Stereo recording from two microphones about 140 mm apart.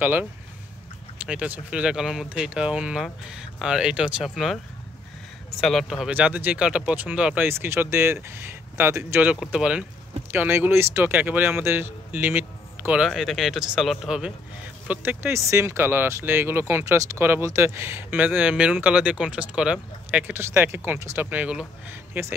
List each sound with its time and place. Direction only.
0.0 s speech: 10° right (ahead or behind)
5.6 s speech: centre (ahead or behind)
14.9 s speech: 15° right (ahead or behind)